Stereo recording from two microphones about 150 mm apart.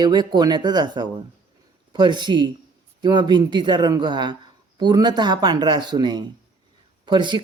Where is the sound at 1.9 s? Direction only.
30° right (ahead or behind).